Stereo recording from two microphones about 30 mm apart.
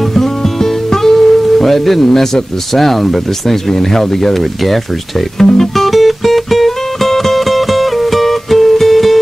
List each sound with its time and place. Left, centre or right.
0.1 s music: centre
2.0 s speech: centre
2.7 s speech: centre
5.4 s music: centre
5.9 s music: centre